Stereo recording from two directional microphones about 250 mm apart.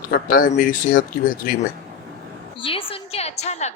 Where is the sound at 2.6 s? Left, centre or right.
Left.